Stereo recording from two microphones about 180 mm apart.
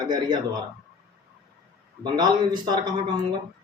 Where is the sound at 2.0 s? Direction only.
25° right (ahead or behind).